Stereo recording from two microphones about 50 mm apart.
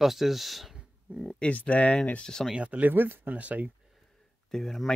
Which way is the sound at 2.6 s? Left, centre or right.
Right.